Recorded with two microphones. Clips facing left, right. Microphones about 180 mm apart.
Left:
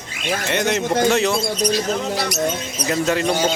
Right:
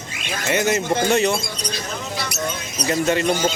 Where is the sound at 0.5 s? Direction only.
5° right (ahead or behind).